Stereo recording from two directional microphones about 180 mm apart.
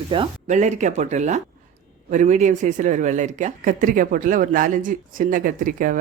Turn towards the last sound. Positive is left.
turn(degrees=-50)  # may be behind; listen again after turning